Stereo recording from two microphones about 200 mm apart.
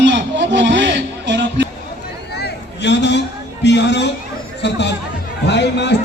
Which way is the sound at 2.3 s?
55° left (ahead or behind).